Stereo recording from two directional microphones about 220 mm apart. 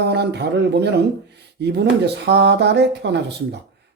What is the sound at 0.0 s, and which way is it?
A man's voice, 50° right (ahead or behind).